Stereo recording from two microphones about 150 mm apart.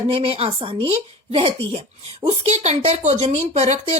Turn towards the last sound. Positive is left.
turn(degrees=-50)  # may be behind; listen again after turning